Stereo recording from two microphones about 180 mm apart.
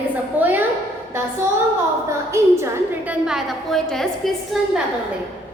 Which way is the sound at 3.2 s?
Centre (ahead or behind).